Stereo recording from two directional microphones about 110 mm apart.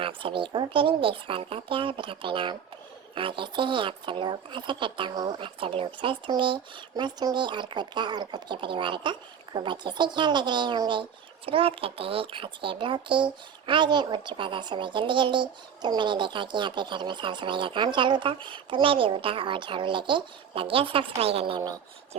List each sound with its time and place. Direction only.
0.0 s speech: 50° right (ahead or behind)